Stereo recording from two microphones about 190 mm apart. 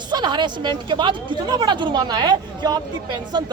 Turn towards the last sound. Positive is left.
turn(degrees=-20)  # may be behind; listen again after turning